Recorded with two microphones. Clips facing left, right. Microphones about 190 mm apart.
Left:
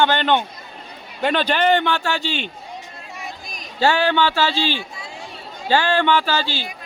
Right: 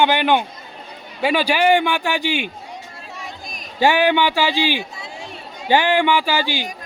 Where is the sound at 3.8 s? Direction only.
15° right (ahead or behind).